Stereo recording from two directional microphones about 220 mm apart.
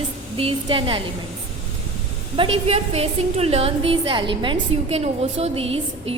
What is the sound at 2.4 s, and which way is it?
A woman's voice, 25° right (ahead or behind).